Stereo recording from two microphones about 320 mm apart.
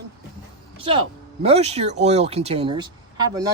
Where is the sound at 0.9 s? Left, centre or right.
Centre.